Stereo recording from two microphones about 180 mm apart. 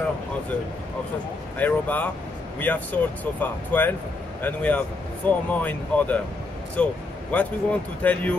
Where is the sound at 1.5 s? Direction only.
10° left (ahead or behind).